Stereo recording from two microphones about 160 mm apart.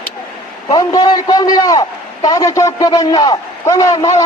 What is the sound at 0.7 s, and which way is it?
A man's voice, 25° left (ahead or behind).